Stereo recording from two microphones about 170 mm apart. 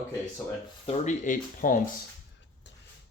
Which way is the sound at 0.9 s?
45° left (ahead or behind).